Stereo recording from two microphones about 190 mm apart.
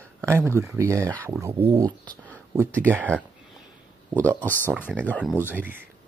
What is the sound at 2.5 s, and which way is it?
Speech, 10° right (ahead or behind).